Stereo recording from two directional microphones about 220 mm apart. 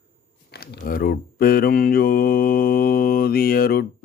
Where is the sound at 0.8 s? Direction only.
40° left (ahead or behind).